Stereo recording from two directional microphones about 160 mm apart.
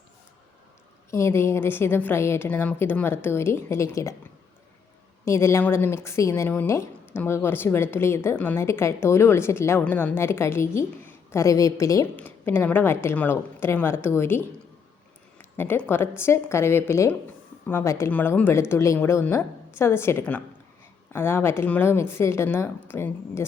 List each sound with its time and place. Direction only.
1.1 s a woman's voice: 15° left (ahead or behind)
5.2 s a woman's voice: 15° left (ahead or behind)